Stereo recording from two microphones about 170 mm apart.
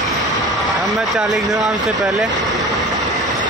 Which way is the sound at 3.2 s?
Centre (ahead or behind).